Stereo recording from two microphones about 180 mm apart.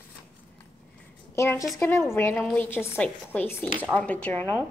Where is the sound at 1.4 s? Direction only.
15° left (ahead or behind).